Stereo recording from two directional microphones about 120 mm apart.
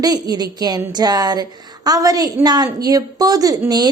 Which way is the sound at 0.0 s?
30° right (ahead or behind).